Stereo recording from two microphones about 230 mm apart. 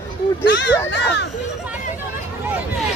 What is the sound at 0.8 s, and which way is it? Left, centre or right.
Speech, left.